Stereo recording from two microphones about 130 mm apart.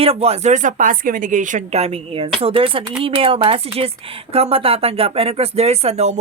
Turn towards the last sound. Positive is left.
turn(degrees=-55)  # may be behind; listen again after turning